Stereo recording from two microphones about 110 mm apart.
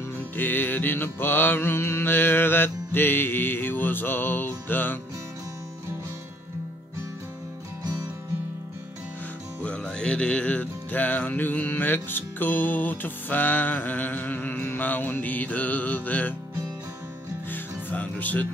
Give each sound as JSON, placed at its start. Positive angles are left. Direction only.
{"t": 0.4, "sound": "mantra", "side_deg": 15}
{"t": 9.6, "sound": "music", "side_deg": 10}
{"t": 17.5, "sound": "music", "side_deg": 15}